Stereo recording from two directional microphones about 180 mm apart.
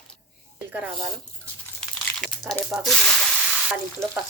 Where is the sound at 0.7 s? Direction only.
5° right (ahead or behind).